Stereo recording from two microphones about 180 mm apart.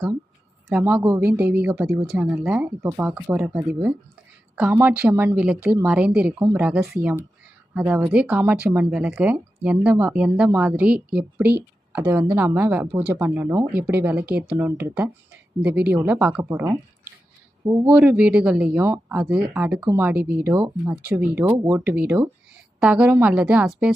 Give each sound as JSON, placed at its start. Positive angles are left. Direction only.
{"t": 0.7, "sound": "speech", "side_deg": -10}
{"t": 17.8, "sound": "speech", "side_deg": -10}